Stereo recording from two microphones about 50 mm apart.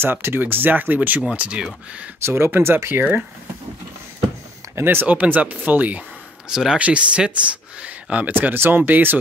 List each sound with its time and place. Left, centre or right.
0.0 s speech: right
2.2 s speech: right
4.7 s speech: right
5.0 s speech: right
6.5 s speech: centre
6.8 s speech: right
8.3 s speech: right